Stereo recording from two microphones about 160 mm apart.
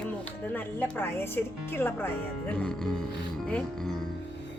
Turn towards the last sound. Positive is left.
turn(degrees=0)  # may be behind; listen again after turning